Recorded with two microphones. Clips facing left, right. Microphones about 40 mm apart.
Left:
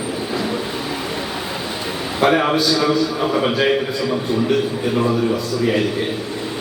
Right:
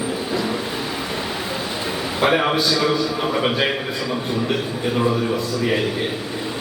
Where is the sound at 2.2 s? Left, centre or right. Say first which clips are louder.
Left 2 dB; centre.